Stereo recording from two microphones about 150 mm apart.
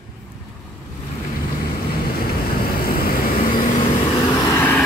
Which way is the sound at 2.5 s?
85° left.